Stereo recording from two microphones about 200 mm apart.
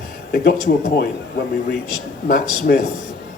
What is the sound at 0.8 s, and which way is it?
Speech, 50° left (ahead or behind).